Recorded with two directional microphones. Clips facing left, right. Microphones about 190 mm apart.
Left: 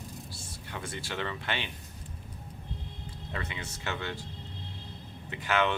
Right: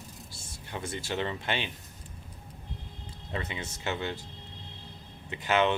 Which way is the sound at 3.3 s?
25° right (ahead or behind).